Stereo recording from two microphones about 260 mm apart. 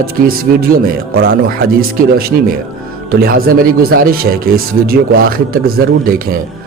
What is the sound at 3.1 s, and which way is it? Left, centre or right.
Speech, right.